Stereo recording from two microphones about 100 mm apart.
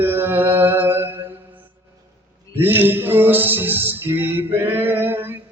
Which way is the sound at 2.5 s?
20° right (ahead or behind).